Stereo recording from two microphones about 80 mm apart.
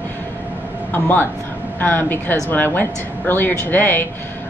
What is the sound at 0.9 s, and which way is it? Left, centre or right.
Speech, left.